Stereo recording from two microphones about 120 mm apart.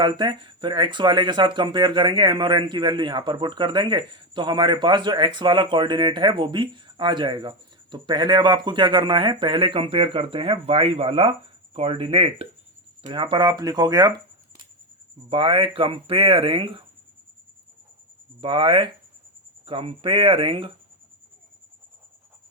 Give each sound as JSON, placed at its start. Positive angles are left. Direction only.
{"t": 0.0, "sound": "speech", "side_deg": -40}
{"t": 15.3, "sound": "speech", "side_deg": -45}
{"t": 18.3, "sound": "speech", "side_deg": -45}